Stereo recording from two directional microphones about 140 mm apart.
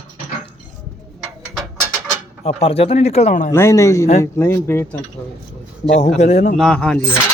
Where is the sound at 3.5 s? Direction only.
20° left (ahead or behind).